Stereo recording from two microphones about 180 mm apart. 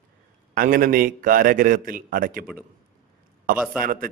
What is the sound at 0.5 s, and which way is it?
A man's voice, 50° right (ahead or behind).